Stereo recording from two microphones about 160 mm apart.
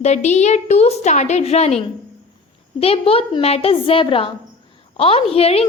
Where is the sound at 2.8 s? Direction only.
35° left (ahead or behind).